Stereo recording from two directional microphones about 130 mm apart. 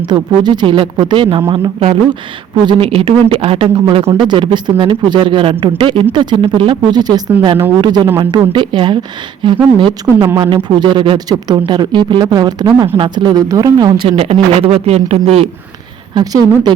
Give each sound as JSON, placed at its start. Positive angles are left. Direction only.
{"t": 0.1, "sound": "speech", "side_deg": -35}
{"t": 14.6, "sound": "speech", "side_deg": -50}
{"t": 16.1, "sound": "speech", "side_deg": -30}